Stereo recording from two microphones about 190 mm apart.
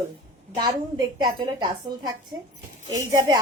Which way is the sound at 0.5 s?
25° right (ahead or behind).